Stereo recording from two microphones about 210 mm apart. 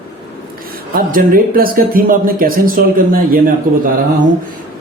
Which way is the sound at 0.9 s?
45° right (ahead or behind).